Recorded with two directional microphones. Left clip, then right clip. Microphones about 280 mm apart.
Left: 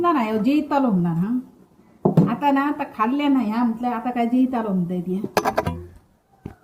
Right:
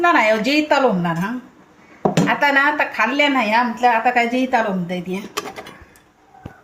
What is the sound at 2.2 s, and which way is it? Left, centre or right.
A woman's voice, right.